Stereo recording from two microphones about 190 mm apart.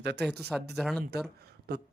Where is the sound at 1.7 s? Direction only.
60° right (ahead or behind).